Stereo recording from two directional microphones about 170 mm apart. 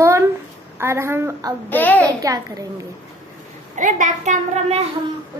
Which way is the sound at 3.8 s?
50° right (ahead or behind).